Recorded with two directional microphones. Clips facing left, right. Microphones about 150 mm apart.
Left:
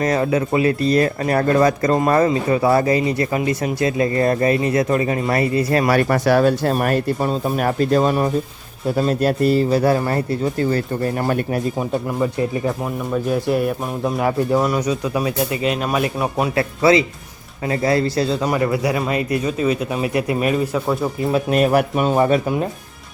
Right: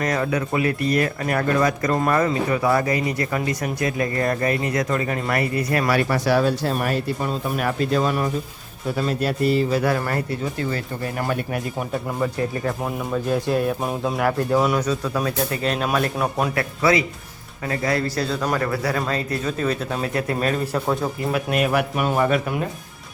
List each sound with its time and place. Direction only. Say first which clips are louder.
0.0 s speech: left 4 dB; 25° left (ahead or behind)
5.9 s speech: left 3 dB; 45° left (ahead or behind)
7.2 s speech: left 5 dB; 35° left (ahead or behind)
11.3 s speech: left 5 dB; 40° left (ahead or behind)
11.8 s speech: left 4 dB; 20° left (ahead or behind)
12.8 s speech: left 3 dB; 5° left (ahead or behind)
16.6 s speech: left 6 dB; 25° left (ahead or behind); by 21.1 s centre (ahead or behind)
21.3 s speech: left 6 dB; 35° left (ahead or behind)
22.0 s speech: left 2 dB; 25° left (ahead or behind)